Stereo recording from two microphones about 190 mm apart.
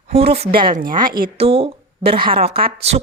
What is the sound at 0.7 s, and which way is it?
Speech, 45° right (ahead or behind).